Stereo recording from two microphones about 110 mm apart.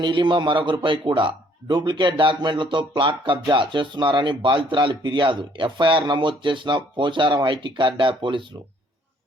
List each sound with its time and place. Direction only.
0.0 s a man's voice: 45° right (ahead or behind)